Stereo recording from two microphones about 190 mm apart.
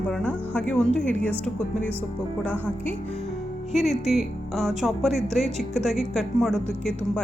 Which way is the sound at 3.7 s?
Centre (ahead or behind).